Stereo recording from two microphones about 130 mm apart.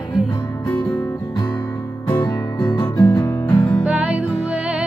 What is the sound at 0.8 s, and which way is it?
Music, 25° left (ahead or behind).